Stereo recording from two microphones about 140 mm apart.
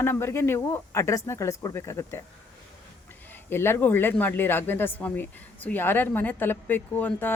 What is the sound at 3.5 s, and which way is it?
Speech, 15° left (ahead or behind).